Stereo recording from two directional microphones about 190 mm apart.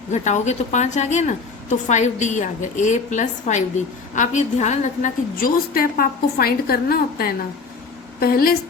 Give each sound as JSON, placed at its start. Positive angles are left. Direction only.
{"t": 0.1, "sound": "a woman's voice", "side_deg": 40}